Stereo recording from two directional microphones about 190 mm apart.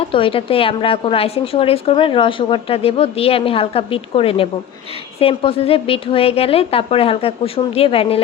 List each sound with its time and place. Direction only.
0.0 s speech: 30° left (ahead or behind)